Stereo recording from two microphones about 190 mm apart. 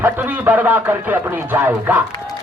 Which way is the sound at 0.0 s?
10° right (ahead or behind).